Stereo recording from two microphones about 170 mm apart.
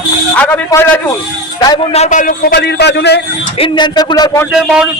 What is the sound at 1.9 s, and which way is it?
A man's voice, 45° left (ahead or behind).